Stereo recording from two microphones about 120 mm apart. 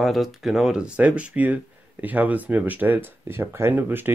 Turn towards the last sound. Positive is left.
turn(degrees=-15)  # may be behind; listen again after turning